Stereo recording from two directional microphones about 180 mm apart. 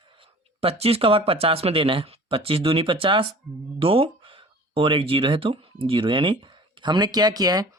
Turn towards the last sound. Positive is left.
turn(degrees=-20)  # may be behind; listen again after turning